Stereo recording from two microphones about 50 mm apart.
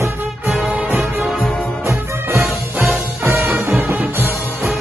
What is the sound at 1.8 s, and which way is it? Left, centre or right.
Music, right.